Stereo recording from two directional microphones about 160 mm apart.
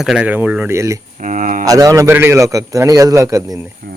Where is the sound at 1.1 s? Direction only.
50° right (ahead or behind).